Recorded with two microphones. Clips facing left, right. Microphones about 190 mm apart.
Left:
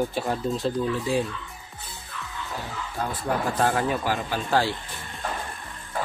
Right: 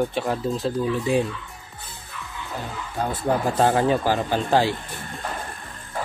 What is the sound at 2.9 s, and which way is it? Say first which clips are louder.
Speech: right 4 dB; 20° right (ahead or behind).